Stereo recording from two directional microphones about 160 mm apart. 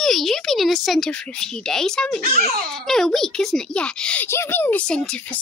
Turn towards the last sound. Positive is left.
turn(degrees=5)  # may be behind; listen again after turning